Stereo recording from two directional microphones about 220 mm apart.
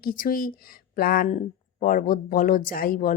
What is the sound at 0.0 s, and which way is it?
Speech, 40° left (ahead or behind).